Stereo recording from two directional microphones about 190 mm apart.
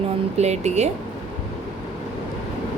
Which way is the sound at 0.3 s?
35° right (ahead or behind).